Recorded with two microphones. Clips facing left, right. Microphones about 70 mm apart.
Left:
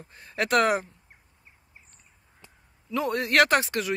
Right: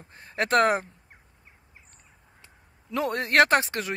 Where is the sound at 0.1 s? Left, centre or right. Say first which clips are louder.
Right 1 dB; right.